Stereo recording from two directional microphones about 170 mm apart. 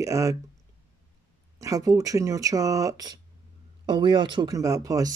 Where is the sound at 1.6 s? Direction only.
20° right (ahead or behind).